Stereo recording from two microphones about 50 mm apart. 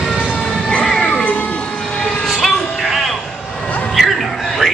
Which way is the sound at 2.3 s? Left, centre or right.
Centre.